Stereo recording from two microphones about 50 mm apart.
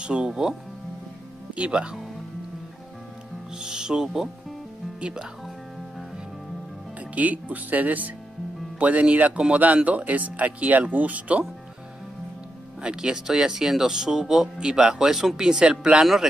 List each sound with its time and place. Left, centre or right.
0.0 s music: centre
0.3 s speech: centre
3.5 s music: centre
5.0 s speech: centre
7.0 s speech: right
12.8 s speech: centre
16.0 s speech: centre